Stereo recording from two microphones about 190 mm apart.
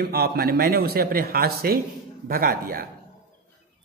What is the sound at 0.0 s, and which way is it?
A man's voice, 55° right (ahead or behind).